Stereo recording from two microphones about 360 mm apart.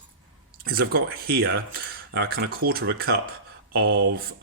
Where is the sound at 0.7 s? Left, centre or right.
Right.